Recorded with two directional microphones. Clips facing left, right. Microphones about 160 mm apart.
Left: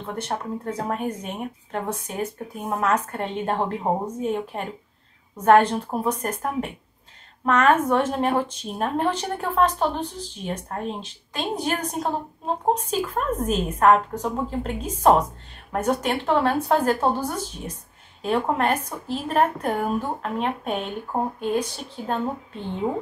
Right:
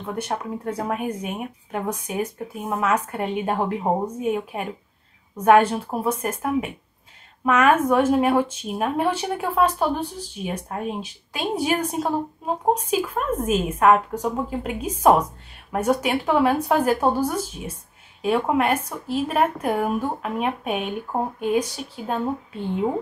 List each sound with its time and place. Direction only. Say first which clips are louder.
0.2 s speech: even; 10° right (ahead or behind)